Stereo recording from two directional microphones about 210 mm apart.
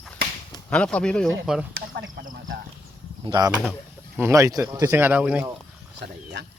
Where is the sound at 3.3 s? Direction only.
20° right (ahead or behind).